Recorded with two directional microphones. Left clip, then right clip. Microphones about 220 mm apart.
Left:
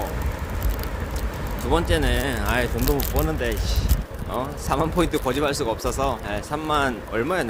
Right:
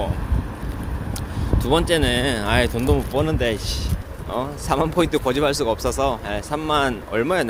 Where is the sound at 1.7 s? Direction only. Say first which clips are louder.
Right 4 dB; 35° right (ahead or behind).